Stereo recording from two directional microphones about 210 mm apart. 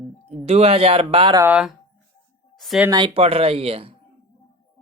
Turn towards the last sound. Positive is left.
turn(degrees=-30)  # may be behind; listen again after turning